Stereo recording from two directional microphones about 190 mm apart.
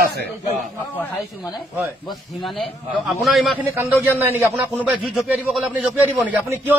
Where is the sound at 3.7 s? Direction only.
10° right (ahead or behind).